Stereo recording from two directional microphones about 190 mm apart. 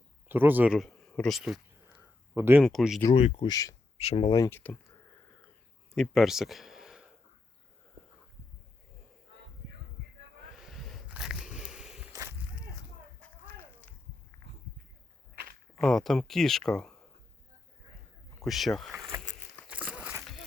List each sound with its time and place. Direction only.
0.3 s speech: 10° right (ahead or behind)
2.6 s speech: centre (ahead or behind)
3.2 s speech: 35° left (ahead or behind)
3.5 s speech: 20° left (ahead or behind)
3.9 s speech: 35° left (ahead or behind)
4.4 s speech: 10° left (ahead or behind)
5.9 s speech: centre (ahead or behind)
10.6 s a sound: centre (ahead or behind)
13.1 s a sound: 10° left (ahead or behind)
15.8 s speech: centre (ahead or behind)
18.3 s speech: centre (ahead or behind)
19.6 s a sound: 5° right (ahead or behind)